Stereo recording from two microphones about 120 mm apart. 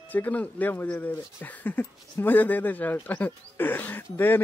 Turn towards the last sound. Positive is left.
turn(degrees=15)  # may be behind; listen again after turning